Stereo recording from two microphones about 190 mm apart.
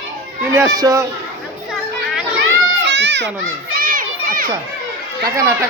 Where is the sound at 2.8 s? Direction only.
65° right (ahead or behind).